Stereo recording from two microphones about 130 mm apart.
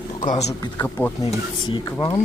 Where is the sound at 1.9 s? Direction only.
25° left (ahead or behind).